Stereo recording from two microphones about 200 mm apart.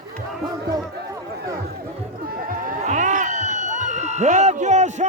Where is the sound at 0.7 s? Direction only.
15° right (ahead or behind).